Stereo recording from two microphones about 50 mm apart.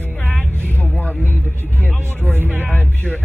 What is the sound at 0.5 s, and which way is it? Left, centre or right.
Vehicle, left.